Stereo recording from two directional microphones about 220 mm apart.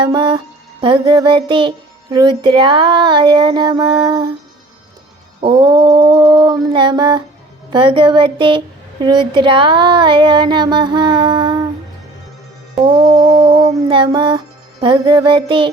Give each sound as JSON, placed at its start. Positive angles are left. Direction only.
{"t": 0.0, "sound": "music", "side_deg": -20}
{"t": 5.4, "sound": "a sound", "side_deg": -20}
{"t": 7.7, "sound": "music", "side_deg": -20}
{"t": 12.8, "sound": "music", "side_deg": -20}